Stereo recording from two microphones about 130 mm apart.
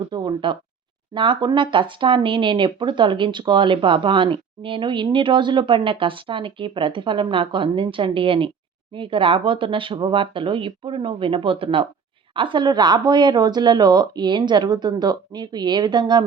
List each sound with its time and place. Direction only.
0.1 s speech: 35° right (ahead or behind)